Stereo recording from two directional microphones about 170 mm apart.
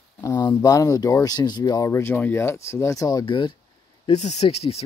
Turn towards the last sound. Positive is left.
turn(degrees=35)  # may be behind; listen again after turning